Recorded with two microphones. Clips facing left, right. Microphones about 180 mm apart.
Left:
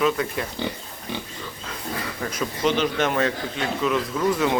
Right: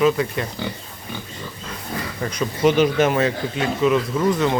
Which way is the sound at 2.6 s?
10° right (ahead or behind).